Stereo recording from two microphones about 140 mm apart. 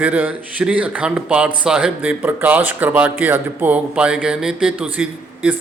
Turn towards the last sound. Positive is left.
turn(degrees=-10)  # may be behind; listen again after turning